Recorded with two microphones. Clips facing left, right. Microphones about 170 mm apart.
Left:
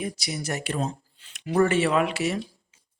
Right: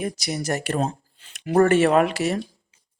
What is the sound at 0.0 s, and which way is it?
Speech, 45° right (ahead or behind).